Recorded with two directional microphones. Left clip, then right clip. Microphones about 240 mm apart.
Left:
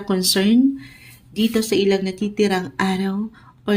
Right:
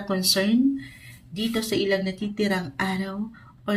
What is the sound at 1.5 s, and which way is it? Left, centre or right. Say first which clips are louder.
Speech: left 5 dB; left.